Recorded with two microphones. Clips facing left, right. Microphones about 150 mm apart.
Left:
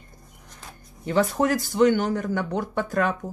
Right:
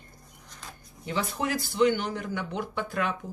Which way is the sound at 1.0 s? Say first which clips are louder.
Left 8 dB; 50° left (ahead or behind).